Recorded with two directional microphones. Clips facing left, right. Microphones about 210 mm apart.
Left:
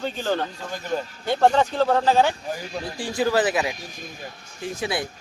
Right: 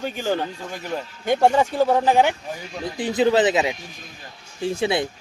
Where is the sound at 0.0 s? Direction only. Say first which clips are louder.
Right 1 dB; 10° right (ahead or behind).